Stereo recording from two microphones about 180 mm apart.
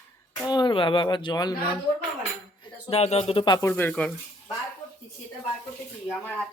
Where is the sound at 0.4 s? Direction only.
25° left (ahead or behind).